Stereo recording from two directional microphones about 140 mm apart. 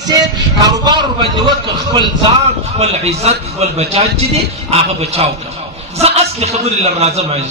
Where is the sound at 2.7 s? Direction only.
50° right (ahead or behind).